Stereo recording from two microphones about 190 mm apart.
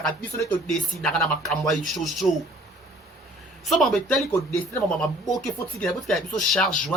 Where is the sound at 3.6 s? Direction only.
Centre (ahead or behind).